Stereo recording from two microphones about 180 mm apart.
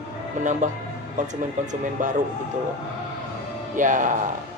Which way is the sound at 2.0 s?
45° right (ahead or behind).